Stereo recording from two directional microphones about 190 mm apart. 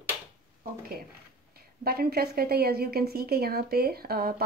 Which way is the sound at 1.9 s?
55° right (ahead or behind).